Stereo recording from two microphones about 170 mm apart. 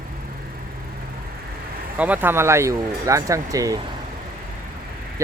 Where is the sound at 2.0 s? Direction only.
10° right (ahead or behind).